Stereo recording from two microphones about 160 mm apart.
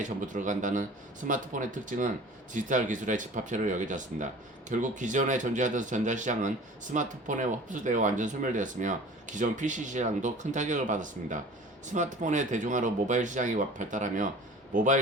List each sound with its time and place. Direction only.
0.0 s a man's voice: 50° right (ahead or behind)